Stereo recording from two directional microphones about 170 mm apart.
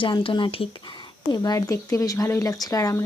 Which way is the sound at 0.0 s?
30° left (ahead or behind).